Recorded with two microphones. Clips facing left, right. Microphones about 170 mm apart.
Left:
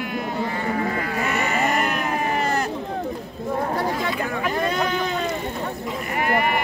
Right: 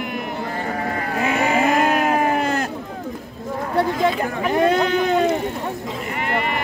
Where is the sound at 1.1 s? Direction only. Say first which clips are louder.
Right 4 dB; 60° right (ahead or behind); by 2.5 s 80° right.